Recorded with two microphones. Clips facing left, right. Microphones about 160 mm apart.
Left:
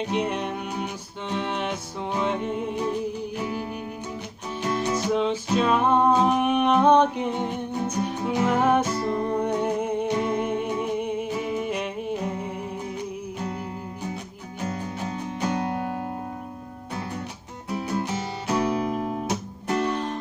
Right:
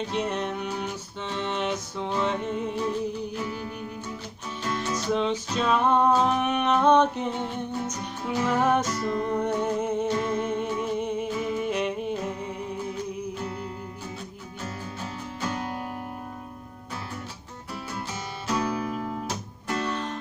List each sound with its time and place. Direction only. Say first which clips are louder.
0.0 s music: left 2 dB; 10° left (ahead or behind)
4.7 s music: left 2 dB; 15° left (ahead or behind)
14.6 s music: left 6 dB; 20° left (ahead or behind)
17.6 s music: left 8 dB; 20° left (ahead or behind)